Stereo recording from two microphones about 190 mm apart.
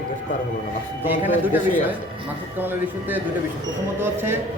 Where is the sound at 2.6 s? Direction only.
10° right (ahead or behind).